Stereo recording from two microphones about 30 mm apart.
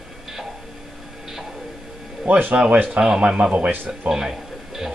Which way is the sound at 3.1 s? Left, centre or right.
Right.